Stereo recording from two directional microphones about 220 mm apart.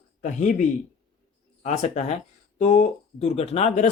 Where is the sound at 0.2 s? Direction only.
35° left (ahead or behind).